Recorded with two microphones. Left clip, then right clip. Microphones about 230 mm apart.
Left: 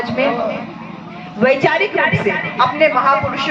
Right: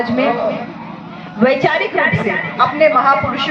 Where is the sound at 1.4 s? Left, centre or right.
Left.